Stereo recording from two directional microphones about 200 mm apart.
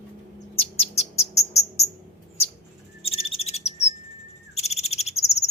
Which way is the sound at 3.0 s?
30° left (ahead or behind).